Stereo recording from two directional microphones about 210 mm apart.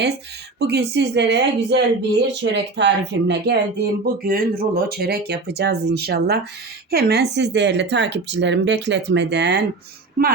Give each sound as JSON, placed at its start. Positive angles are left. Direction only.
{"t": 0.6, "sound": "a woman's voice", "side_deg": -50}